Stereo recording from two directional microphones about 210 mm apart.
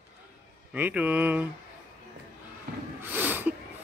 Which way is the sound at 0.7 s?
5° right (ahead or behind).